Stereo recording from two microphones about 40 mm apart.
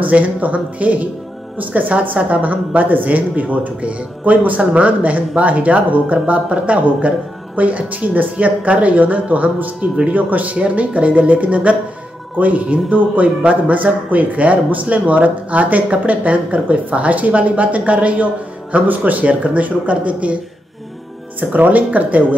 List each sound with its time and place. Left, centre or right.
0.1 s speech: right
21.4 s speech: right